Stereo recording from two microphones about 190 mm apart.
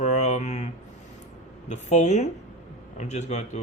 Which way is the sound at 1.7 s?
35° left (ahead or behind).